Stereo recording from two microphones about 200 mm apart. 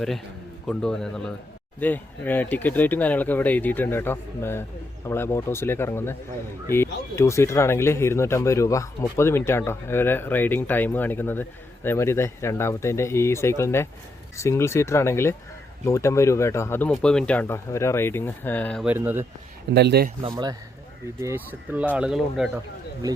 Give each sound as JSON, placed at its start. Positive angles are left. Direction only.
{"t": 0.7, "sound": "a man's voice", "side_deg": 5}
{"t": 18.9, "sound": "speech", "side_deg": -10}
{"t": 19.7, "sound": "speech", "side_deg": -55}
{"t": 20.2, "sound": "speech", "side_deg": -20}